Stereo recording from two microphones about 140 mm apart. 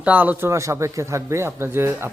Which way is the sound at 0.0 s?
10° right (ahead or behind).